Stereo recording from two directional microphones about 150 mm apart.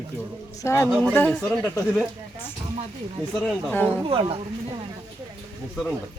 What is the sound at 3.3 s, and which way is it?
Speech, centre (ahead or behind).